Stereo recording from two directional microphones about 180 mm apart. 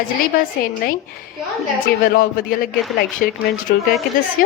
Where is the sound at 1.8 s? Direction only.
55° left (ahead or behind).